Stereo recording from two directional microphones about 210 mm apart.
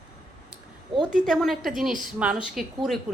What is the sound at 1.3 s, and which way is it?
A woman's voice, centre (ahead or behind).